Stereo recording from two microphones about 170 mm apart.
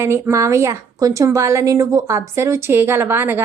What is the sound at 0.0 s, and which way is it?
A woman's voice, 15° right (ahead or behind).